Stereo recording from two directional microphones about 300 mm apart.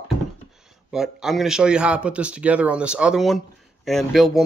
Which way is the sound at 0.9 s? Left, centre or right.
Centre.